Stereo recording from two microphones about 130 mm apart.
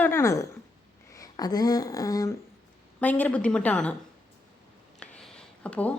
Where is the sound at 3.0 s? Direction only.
10° left (ahead or behind).